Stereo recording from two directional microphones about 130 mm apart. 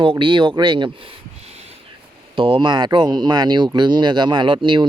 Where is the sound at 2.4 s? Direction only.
40° right (ahead or behind).